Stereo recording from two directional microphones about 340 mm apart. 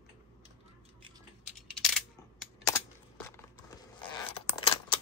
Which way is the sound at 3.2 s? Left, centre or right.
Centre.